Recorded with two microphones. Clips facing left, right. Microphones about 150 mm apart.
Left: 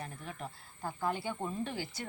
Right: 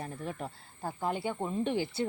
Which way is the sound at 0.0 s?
35° right (ahead or behind).